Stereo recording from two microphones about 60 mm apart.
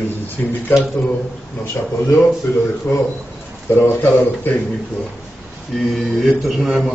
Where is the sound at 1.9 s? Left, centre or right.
Left.